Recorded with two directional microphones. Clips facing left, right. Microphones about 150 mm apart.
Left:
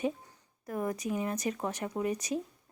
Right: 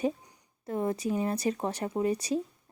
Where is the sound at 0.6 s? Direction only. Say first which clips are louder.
Right 4 dB; 25° right (ahead or behind).